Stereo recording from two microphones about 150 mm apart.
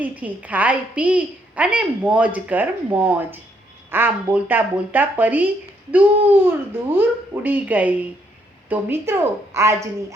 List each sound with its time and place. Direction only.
0.0 s a woman's voice: 10° right (ahead or behind)